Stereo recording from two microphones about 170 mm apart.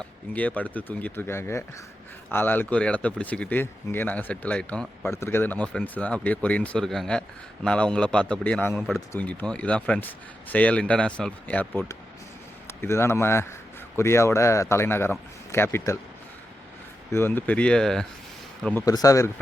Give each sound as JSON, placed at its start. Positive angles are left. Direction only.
{"t": 0.3, "sound": "speech", "side_deg": 10}
{"t": 12.8, "sound": "speech", "side_deg": 15}
{"t": 17.1, "sound": "speech", "side_deg": 15}
{"t": 18.9, "sound": "speech", "side_deg": 20}